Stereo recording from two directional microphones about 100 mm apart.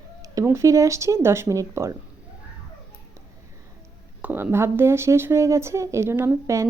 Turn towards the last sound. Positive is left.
turn(degrees=-30)  # may be behind; listen again after turning